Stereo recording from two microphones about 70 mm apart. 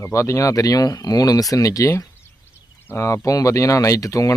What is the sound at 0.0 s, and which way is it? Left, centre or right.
Speech, left.